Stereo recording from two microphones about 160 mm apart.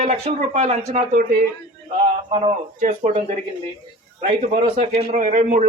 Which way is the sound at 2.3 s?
45° right (ahead or behind).